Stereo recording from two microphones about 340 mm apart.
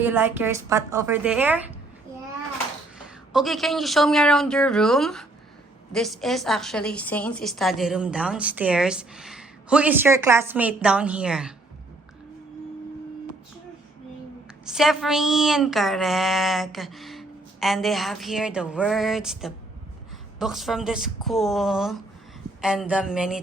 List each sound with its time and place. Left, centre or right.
0.0 s a woman's voice: centre
3.3 s a woman's voice: centre
14.6 s a woman's voice: centre